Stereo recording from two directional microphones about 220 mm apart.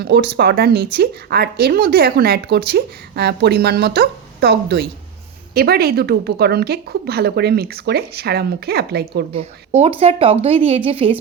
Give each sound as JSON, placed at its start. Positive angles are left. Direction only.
{"t": 0.0, "sound": "speech", "side_deg": -45}
{"t": 9.3, "sound": "a woman's voice", "side_deg": -30}